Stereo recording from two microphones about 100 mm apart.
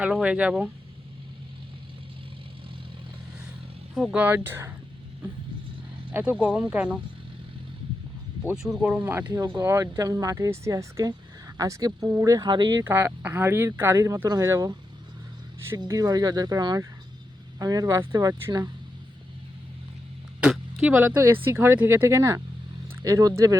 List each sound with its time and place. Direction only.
0.0 s speech: 10° right (ahead or behind)
3.9 s speech: 10° right (ahead or behind)
6.1 s speech: 20° right (ahead or behind)
6.3 s speech: 10° right (ahead or behind)
8.5 s speech: 5° right (ahead or behind)
8.9 s speech: 20° right (ahead or behind)
9.6 s speech: 35° right (ahead or behind)
12.5 s speech: 50° right (ahead or behind)
12.8 s speech: 25° right (ahead or behind)
20.4 s a sound: 10° right (ahead or behind)
21.4 s speech: 20° right (ahead or behind)